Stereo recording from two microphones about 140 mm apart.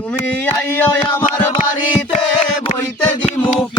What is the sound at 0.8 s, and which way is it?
Music, 15° left (ahead or behind).